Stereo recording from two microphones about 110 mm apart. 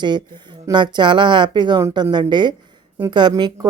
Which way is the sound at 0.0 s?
45° right (ahead or behind).